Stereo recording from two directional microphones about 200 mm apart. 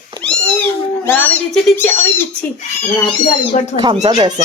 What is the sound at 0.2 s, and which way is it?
Cat, 5° left (ahead or behind).